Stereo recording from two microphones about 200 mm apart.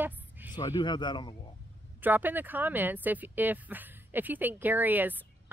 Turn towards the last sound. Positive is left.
turn(degrees=-10)  # may be behind; listen again after turning